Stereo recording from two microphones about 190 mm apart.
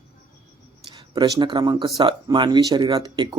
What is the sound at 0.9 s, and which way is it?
Speech, 20° right (ahead or behind).